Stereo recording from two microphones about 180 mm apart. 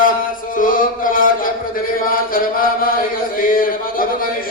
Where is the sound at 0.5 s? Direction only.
50° left (ahead or behind).